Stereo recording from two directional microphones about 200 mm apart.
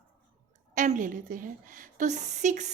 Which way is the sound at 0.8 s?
40° right (ahead or behind).